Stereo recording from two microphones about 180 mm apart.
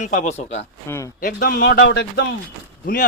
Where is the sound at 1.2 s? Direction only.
50° left (ahead or behind).